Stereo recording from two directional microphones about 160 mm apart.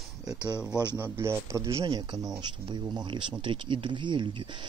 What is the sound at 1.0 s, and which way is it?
A man's voice, 15° right (ahead or behind).